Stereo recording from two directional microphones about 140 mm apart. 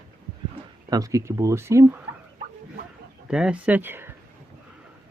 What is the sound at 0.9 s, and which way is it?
Speech, 25° right (ahead or behind).